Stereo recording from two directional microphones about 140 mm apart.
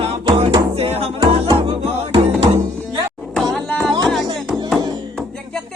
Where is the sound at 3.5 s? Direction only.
5° left (ahead or behind).